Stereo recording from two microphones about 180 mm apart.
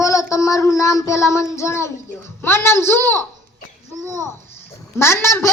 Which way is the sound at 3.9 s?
20° right (ahead or behind).